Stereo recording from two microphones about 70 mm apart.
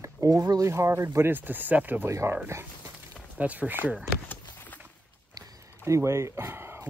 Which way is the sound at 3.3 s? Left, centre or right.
Right.